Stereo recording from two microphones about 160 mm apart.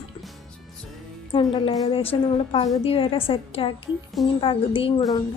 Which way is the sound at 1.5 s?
25° left (ahead or behind).